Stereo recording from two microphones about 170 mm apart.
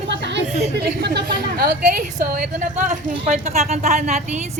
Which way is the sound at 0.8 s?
75° right (ahead or behind).